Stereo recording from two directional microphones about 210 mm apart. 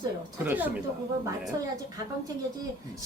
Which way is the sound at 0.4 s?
10° right (ahead or behind).